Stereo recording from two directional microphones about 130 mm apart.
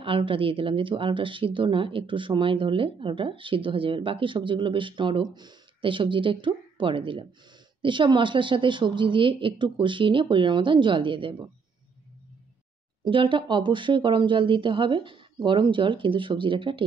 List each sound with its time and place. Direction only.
0.0 s speech: 40° right (ahead or behind)
13.0 s speech: 40° right (ahead or behind)